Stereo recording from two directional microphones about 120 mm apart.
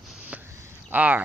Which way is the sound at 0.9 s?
15° right (ahead or behind).